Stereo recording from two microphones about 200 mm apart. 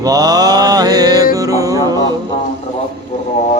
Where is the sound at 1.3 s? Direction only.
15° right (ahead or behind).